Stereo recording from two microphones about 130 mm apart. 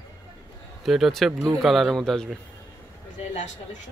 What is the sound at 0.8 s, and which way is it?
Speech, centre (ahead or behind).